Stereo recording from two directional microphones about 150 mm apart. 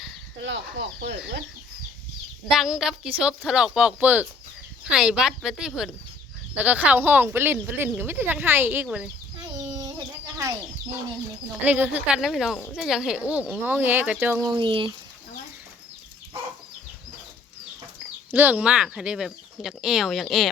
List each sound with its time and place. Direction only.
2.5 s speech: 5° right (ahead or behind)
11.6 s speech: 10° right (ahead or behind)
14.4 s speech: 30° right (ahead or behind)
18.3 s speech: 10° right (ahead or behind)